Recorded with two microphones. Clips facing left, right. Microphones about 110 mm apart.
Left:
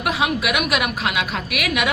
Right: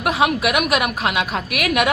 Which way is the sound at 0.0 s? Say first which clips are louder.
Right 3 dB; 40° right (ahead or behind).